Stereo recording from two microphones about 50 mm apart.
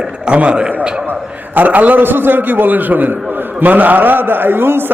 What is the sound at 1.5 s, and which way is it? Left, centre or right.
A man's voice, right.